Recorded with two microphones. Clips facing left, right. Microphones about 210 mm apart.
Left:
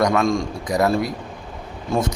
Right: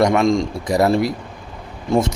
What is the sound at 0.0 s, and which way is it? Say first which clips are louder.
Speech: right 3 dB; 20° right (ahead or behind).